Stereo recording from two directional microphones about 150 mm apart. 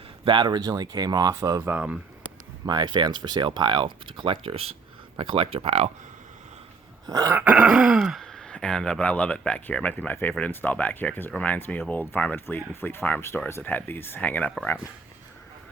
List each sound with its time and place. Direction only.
0.3 s speech: 30° right (ahead or behind)
1.7 s speech: 5° right (ahead or behind)
2.6 s speech: 30° right (ahead or behind)
7.1 s speech: 20° right (ahead or behind)
7.3 s speech: 10° right (ahead or behind); by 14.5 s 10° left (ahead or behind)